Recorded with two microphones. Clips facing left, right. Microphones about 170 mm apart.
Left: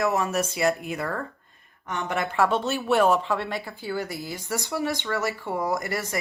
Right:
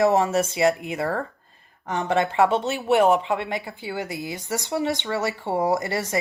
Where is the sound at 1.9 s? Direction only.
35° right (ahead or behind).